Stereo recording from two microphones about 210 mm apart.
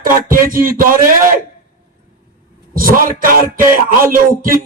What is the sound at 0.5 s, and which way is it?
Speech, 40° right (ahead or behind).